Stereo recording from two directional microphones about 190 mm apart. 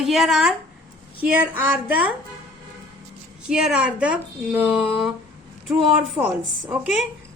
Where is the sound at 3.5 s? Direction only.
5° right (ahead or behind).